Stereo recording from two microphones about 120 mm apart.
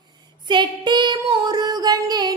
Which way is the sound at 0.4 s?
40° right (ahead or behind).